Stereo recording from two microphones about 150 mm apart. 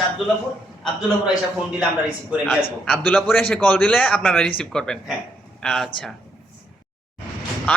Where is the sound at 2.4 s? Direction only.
5° left (ahead or behind).